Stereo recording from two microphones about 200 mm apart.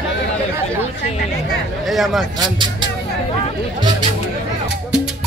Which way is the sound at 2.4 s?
25° right (ahead or behind).